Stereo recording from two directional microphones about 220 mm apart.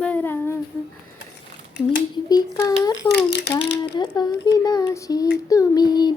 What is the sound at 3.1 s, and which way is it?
Speech, 45° left (ahead or behind).